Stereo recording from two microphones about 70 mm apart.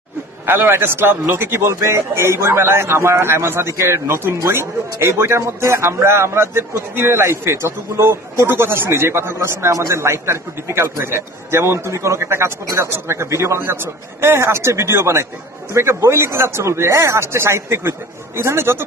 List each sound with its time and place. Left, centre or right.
0.5 s speech: right
12.6 s speech: right